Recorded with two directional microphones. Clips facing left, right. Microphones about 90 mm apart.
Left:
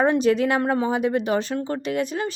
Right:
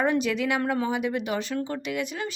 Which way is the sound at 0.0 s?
35° left (ahead or behind).